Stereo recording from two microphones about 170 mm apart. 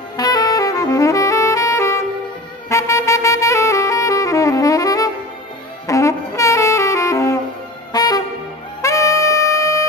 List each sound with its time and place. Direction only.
0.2 s saxophone: 20° left (ahead or behind)
7.9 s music: 20° left (ahead or behind)